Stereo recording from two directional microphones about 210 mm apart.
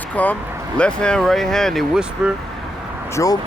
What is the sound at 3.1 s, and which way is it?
Speech, 15° left (ahead or behind).